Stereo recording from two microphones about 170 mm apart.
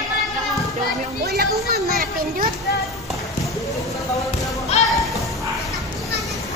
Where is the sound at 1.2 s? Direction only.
70° right (ahead or behind).